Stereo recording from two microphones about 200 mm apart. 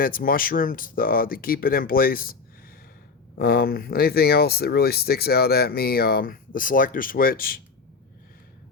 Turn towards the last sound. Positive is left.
turn(degrees=45)  # may be behind; listen again after turning